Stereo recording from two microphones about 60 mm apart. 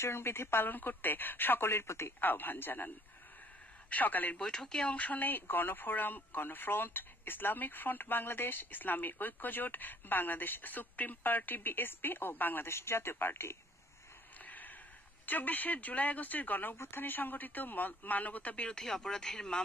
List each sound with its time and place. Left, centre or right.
0.0 s speech: left
3.9 s speech: left
4.4 s speech: centre
4.9 s speech: left
14.4 s a sound: left
15.2 s speech: left
16.7 s speech: left
17.0 s speech: left
18.7 s speech: centre